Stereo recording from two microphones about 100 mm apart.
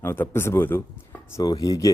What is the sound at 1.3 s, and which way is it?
Speech, 40° left (ahead or behind).